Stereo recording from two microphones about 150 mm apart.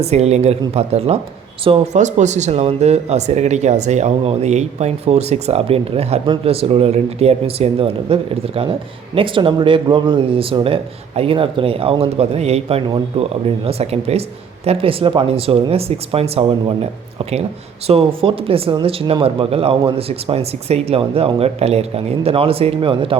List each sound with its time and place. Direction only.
0.0 s speech: 45° right (ahead or behind)